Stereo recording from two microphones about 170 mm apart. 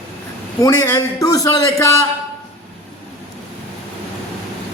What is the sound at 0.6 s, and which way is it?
A man's voice, 20° left (ahead or behind).